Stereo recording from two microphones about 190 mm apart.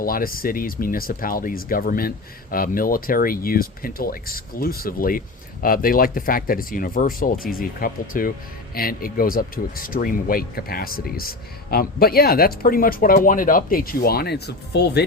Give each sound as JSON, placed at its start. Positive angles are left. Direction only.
{"t": 0.0, "sound": "speech", "side_deg": 50}